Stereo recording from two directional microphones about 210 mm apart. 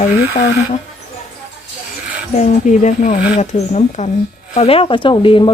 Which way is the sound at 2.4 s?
35° left (ahead or behind).